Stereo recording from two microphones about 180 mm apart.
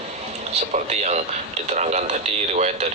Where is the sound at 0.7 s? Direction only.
40° right (ahead or behind).